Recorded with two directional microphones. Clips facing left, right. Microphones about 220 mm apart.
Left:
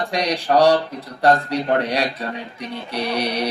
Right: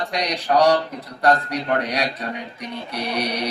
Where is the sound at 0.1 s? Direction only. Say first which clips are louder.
Left 3 dB; 30° left (ahead or behind).